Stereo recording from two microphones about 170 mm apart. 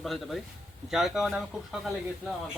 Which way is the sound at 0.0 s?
Centre (ahead or behind).